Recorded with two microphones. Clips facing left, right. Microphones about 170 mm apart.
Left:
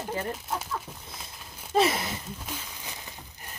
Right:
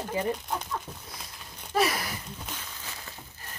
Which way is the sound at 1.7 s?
25° left (ahead or behind).